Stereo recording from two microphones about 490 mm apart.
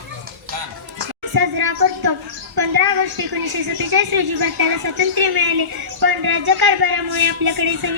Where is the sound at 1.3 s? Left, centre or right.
Right.